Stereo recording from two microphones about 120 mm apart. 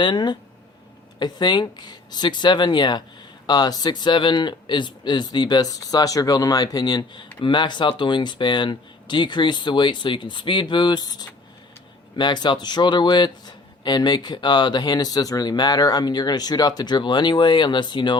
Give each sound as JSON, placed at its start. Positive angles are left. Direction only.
{"t": 0.0, "sound": "speech", "side_deg": 40}